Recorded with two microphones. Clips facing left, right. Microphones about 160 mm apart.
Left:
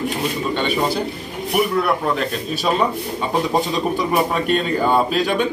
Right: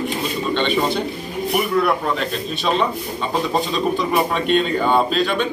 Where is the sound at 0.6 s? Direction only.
10° left (ahead or behind).